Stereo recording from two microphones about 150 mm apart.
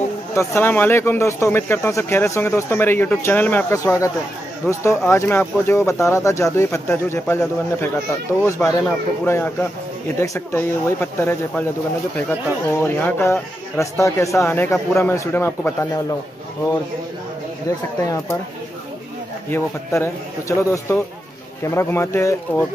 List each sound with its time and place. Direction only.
0.3 s speech: 15° left (ahead or behind)
12.8 s speech: 15° left (ahead or behind)
17.6 s speech: 20° left (ahead or behind)
19.5 s speech: 15° left (ahead or behind)